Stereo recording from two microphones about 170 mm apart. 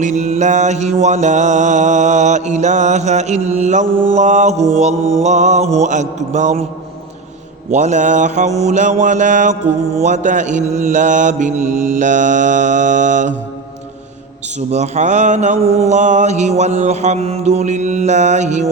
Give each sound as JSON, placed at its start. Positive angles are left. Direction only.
{"t": 0.0, "sound": "mantra", "side_deg": -45}
{"t": 3.9, "sound": "mantra", "side_deg": -30}
{"t": 4.2, "sound": "mantra", "side_deg": -45}
{"t": 7.7, "sound": "mantra", "side_deg": -45}
{"t": 14.7, "sound": "mantra", "side_deg": -45}